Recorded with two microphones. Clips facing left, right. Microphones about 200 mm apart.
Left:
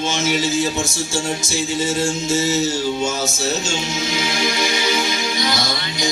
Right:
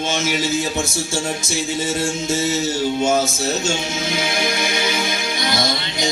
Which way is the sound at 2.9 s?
55° right (ahead or behind).